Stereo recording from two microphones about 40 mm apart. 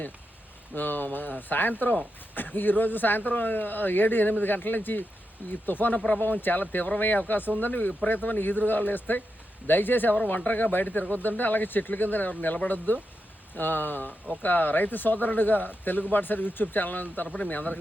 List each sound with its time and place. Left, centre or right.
0.8 s speech: left